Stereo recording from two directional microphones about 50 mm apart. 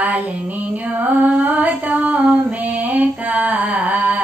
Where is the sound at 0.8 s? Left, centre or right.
Right.